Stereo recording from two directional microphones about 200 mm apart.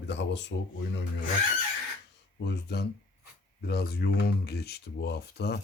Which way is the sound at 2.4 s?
55° left (ahead or behind).